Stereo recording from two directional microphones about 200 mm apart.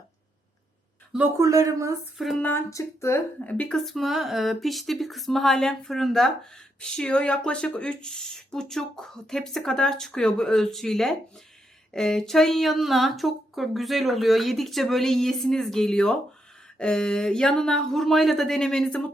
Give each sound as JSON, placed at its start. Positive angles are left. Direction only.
{"t": 1.1, "sound": "speech", "side_deg": -10}
{"t": 2.1, "sound": "speech", "side_deg": 0}